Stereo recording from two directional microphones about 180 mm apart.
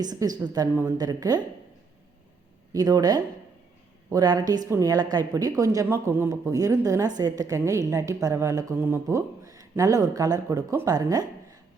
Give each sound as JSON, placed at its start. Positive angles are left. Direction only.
{"t": 0.0, "sound": "a woman's voice", "side_deg": -20}
{"t": 2.7, "sound": "a woman's voice", "side_deg": -20}